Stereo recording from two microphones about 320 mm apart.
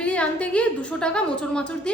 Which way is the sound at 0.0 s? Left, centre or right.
Centre.